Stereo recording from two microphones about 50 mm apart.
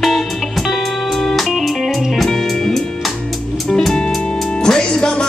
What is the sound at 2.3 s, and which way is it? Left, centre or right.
Music, centre.